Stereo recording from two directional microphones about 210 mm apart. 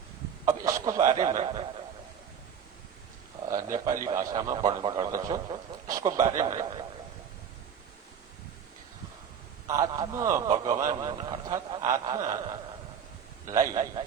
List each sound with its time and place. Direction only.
0.4 s chuckle: 15° right (ahead or behind)
3.5 s speech: 15° right (ahead or behind)
9.6 s speech: 15° right (ahead or behind)